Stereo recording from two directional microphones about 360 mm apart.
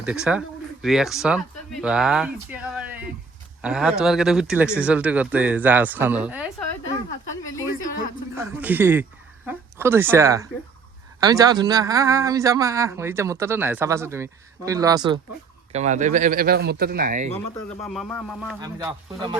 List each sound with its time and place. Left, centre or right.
0.0 s speech: centre
8.5 s speech: centre; by 17.3 s right
17.5 s speech: centre